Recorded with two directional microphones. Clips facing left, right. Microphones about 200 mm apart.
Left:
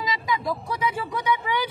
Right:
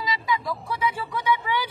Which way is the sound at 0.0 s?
15° left (ahead or behind).